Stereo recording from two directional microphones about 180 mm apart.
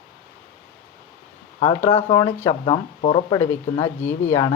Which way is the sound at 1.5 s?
30° left (ahead or behind).